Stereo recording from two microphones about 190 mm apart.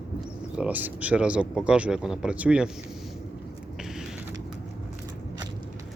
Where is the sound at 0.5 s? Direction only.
10° right (ahead or behind).